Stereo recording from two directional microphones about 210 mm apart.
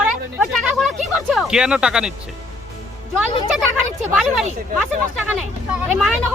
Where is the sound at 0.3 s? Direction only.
Centre (ahead or behind).